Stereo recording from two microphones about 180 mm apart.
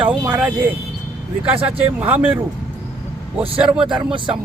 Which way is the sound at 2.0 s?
10° right (ahead or behind).